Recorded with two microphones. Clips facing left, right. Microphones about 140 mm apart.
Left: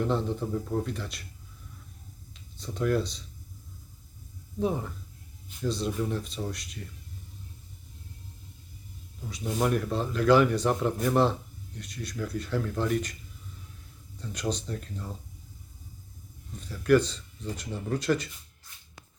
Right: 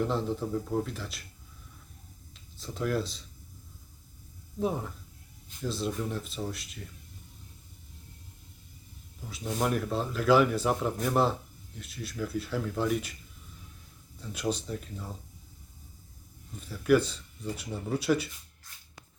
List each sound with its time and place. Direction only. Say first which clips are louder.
0.0 s speech: left 1 dB; centre (ahead or behind)
2.3 s speech: left 2 dB; centre (ahead or behind)
4.6 s speech: left 2 dB; centre (ahead or behind)
9.3 s speech: left 2 dB; centre (ahead or behind)
14.2 s speech: even; 5° right (ahead or behind)
16.6 s speech: left 2 dB; 5° right (ahead or behind)